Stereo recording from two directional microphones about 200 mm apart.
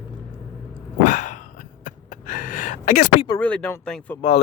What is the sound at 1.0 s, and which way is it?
Dog, 40° left (ahead or behind).